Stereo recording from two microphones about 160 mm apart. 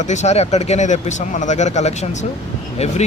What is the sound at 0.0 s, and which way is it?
Speech, 45° left (ahead or behind).